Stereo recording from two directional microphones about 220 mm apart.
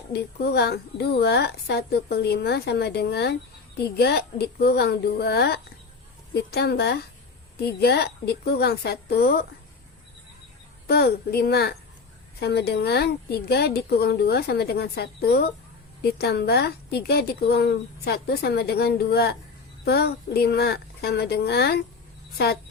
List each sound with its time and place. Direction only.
0.1 s a woman's voice: 45° left (ahead or behind)
10.8 s a woman's voice: 45° left (ahead or behind)